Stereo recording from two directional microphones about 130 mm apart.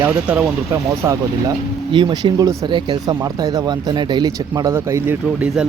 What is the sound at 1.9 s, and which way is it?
Speech, 35° right (ahead or behind).